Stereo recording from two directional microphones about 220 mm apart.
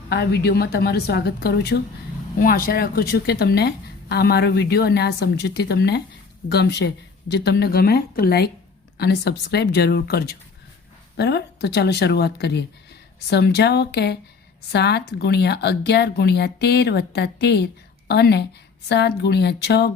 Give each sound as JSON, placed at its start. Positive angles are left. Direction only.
{"t": 0.1, "sound": "speech", "side_deg": 45}